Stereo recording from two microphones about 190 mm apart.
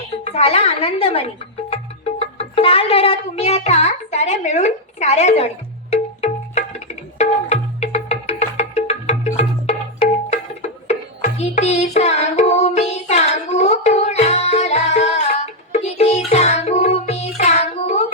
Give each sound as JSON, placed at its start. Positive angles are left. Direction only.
{"t": 0.3, "sound": "a woman's voice", "side_deg": 35}
{"t": 5.9, "sound": "tabla", "side_deg": 35}
{"t": 10.8, "sound": "music", "side_deg": 35}